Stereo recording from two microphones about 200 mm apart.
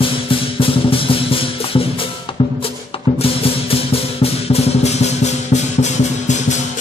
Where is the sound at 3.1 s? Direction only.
30° left (ahead or behind).